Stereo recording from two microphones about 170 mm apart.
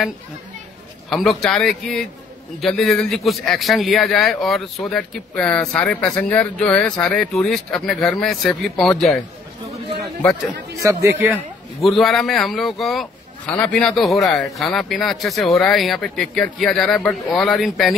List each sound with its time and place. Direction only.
1.1 s a man's voice: centre (ahead or behind)
10.8 s speech: 20° right (ahead or behind)
11.8 s a man's voice: centre (ahead or behind)